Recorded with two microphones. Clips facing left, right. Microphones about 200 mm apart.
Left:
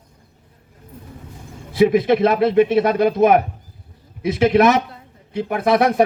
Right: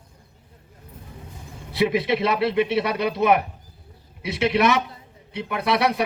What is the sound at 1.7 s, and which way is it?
Speech, 45° left (ahead or behind).